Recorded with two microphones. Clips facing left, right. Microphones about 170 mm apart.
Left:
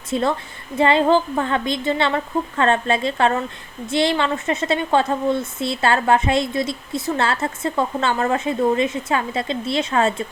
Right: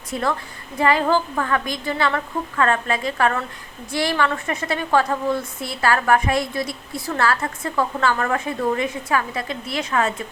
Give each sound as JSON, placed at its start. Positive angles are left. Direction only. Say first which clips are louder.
{"t": 0.1, "sound": "a woman's voice", "louder": "left 3 dB", "side_deg": 25}